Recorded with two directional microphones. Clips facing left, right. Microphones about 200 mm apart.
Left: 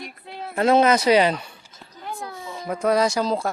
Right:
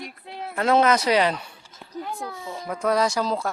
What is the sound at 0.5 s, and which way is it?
Speech, 25° left (ahead or behind).